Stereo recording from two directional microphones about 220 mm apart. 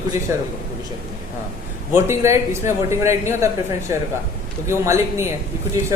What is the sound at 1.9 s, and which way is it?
Speech, 10° right (ahead or behind).